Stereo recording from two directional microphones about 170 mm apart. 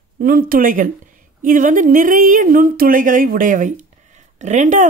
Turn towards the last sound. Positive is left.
turn(degrees=-45)  # may be behind; listen again after turning